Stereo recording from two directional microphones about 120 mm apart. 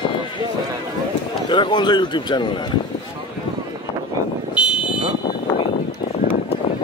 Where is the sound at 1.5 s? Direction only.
40° left (ahead or behind).